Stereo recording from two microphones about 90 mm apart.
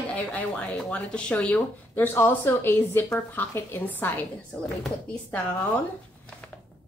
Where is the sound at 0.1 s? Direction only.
15° left (ahead or behind).